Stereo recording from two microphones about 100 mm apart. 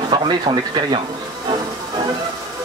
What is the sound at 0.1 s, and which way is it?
Speech, 50° right (ahead or behind).